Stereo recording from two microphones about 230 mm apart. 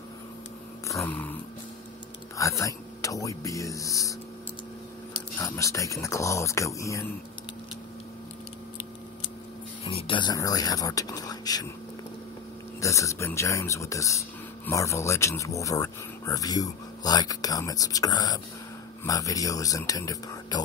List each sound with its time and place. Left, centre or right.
0.9 s speech: centre
2.3 s speech: centre
5.4 s speech: centre
9.8 s speech: left
12.8 s speech: centre